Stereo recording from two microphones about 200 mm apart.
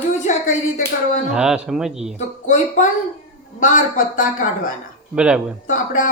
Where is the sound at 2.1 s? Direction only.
35° left (ahead or behind).